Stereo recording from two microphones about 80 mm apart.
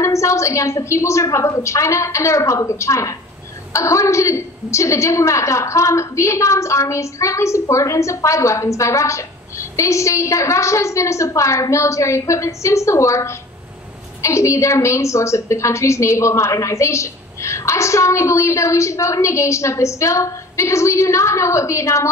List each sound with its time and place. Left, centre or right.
0.0 s a woman's voice: left